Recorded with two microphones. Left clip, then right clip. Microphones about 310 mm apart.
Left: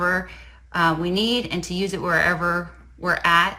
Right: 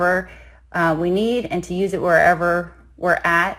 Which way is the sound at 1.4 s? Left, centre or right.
Centre.